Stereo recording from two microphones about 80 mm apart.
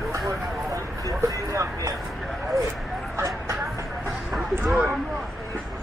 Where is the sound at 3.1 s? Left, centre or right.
Right.